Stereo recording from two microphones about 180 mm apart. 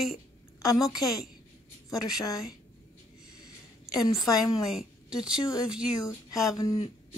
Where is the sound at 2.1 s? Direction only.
20° left (ahead or behind).